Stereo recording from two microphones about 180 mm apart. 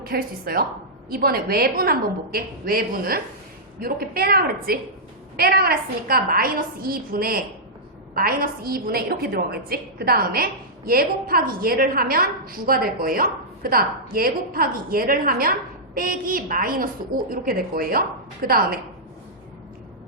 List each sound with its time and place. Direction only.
0.0 s a woman's voice: 55° right (ahead or behind)